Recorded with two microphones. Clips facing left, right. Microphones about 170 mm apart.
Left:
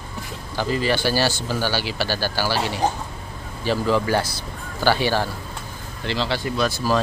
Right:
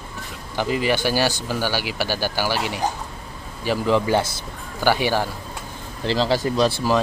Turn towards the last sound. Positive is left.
turn(degrees=-30)  # may be behind; listen again after turning